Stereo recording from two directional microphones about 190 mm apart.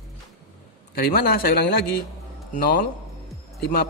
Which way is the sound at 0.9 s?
50° left (ahead or behind).